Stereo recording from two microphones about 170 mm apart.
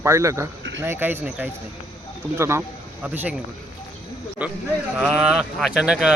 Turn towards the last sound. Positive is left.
turn(degrees=-5)  # may be behind; listen again after turning